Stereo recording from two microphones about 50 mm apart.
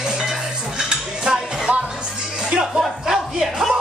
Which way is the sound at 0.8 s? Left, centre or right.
Centre.